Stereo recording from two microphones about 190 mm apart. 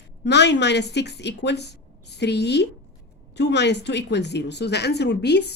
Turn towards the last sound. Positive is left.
turn(degrees=60)  # may be behind; listen again after turning